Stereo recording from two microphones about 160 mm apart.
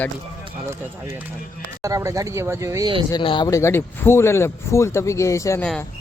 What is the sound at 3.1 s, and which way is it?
Speech, 30° left (ahead or behind).